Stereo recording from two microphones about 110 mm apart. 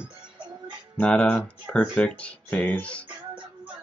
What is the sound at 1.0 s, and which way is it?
Speech, 10° left (ahead or behind).